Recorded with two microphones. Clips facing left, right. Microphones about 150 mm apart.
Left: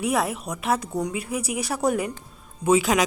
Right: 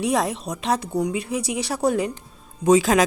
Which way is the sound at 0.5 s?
35° right (ahead or behind).